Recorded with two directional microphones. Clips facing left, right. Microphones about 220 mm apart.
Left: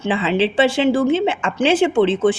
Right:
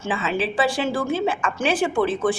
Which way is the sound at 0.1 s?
30° left (ahead or behind).